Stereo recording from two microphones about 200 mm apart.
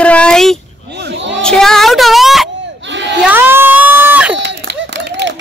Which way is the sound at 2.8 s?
65° right (ahead or behind).